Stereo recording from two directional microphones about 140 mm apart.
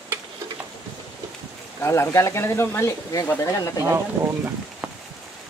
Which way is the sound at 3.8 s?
20° right (ahead or behind).